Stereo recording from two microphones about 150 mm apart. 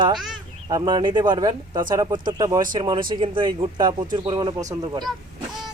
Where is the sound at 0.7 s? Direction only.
30° right (ahead or behind).